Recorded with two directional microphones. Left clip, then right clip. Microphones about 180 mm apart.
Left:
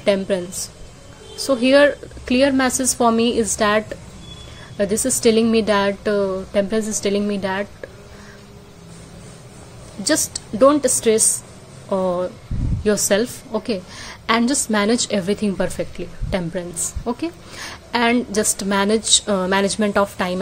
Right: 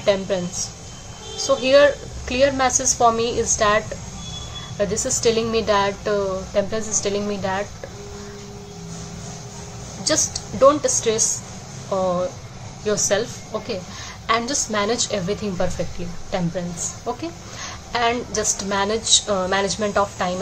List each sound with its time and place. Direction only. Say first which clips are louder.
0.0 s a woman's voice: left 1 dB; 40° left (ahead or behind)
1.4 s a woman's voice: left 1 dB; 40° left (ahead or behind)
10.0 s a woman's voice: left 1 dB; 40° left (ahead or behind)